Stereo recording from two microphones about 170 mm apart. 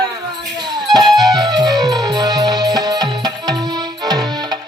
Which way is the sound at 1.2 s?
20° right (ahead or behind).